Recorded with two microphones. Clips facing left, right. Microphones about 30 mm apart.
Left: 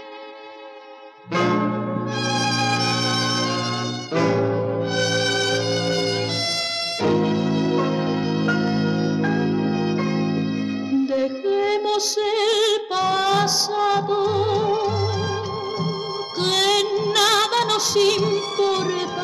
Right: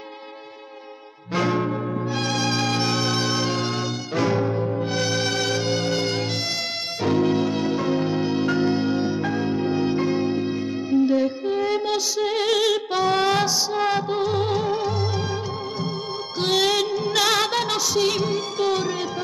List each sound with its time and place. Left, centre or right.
1.4 s music: centre
14.2 s music: centre
16.3 s music: centre